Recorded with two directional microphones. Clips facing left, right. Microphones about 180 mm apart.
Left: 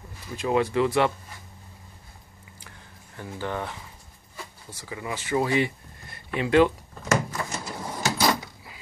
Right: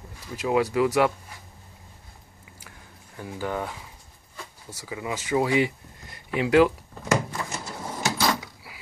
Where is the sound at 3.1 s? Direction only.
10° right (ahead or behind).